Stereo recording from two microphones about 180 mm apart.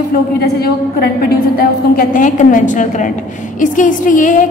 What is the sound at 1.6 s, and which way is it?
A woman's voice, 50° left (ahead or behind).